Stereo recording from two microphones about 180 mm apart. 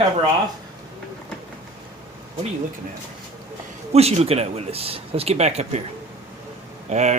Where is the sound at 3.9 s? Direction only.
35° right (ahead or behind).